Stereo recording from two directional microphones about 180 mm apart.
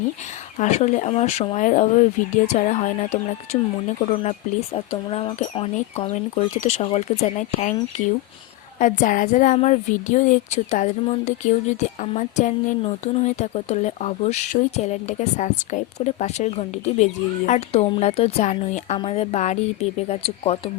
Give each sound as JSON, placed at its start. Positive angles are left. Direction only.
{"t": 0.6, "sound": "a woman's voice", "side_deg": 40}